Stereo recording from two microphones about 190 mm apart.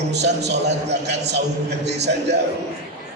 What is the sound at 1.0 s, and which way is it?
Speech, 60° right (ahead or behind).